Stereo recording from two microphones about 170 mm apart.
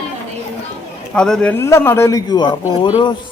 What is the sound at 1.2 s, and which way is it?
Speech, 5° left (ahead or behind).